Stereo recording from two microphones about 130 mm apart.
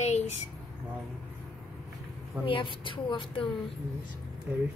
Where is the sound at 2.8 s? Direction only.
40° left (ahead or behind).